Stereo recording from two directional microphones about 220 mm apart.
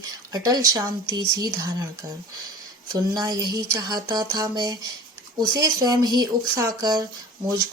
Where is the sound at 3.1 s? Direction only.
20° right (ahead or behind).